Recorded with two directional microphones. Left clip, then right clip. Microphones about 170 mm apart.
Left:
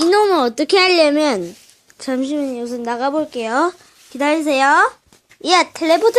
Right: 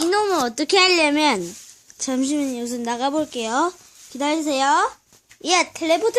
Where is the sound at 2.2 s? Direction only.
25° right (ahead or behind).